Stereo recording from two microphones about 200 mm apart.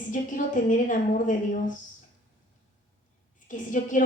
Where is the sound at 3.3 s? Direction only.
40° left (ahead or behind).